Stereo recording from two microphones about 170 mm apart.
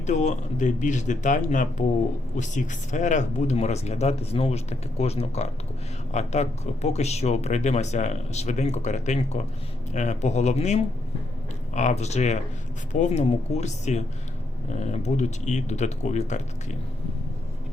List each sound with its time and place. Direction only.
0.0 s speech: 45° left (ahead or behind)